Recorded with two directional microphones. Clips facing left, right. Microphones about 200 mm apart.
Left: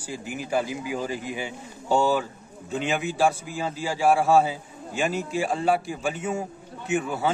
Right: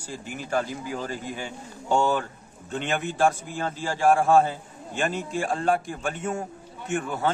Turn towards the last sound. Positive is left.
turn(degrees=5)  # may be behind; listen again after turning